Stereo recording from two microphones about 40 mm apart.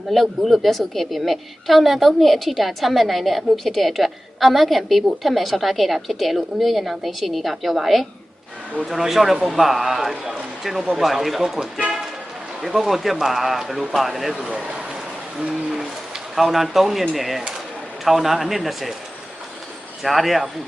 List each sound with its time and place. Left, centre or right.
0.1 s a woman's voice: centre
14.3 s speech: centre
16.3 s a woman's voice: centre
20.0 s a woman's voice: centre